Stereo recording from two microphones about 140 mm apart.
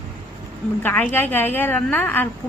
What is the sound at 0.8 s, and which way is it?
A woman's voice, 15° left (ahead or behind).